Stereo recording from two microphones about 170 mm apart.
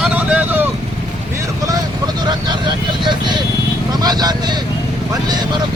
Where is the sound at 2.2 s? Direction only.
25° right (ahead or behind).